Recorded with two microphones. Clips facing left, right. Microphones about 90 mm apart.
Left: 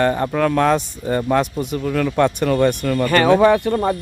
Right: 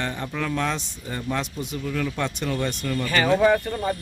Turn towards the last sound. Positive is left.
turn(degrees=75)  # may be behind; listen again after turning